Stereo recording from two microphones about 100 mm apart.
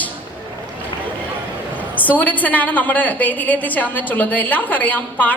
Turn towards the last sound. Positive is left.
turn(degrees=15)  # may be behind; listen again after turning